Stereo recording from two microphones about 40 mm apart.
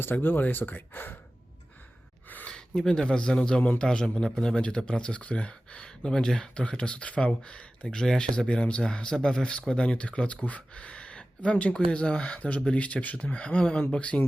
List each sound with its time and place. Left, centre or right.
0.0 s speech: left
2.5 s speech: centre
7.9 s speech: centre